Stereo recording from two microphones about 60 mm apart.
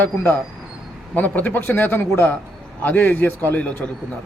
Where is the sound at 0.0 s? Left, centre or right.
Left.